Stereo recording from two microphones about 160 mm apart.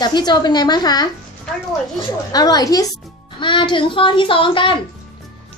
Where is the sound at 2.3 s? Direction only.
25° left (ahead or behind).